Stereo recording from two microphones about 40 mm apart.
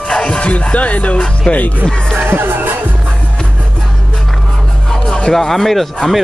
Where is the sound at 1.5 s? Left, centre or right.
Left.